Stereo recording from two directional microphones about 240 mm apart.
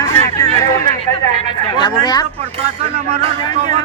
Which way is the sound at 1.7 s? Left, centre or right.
Centre.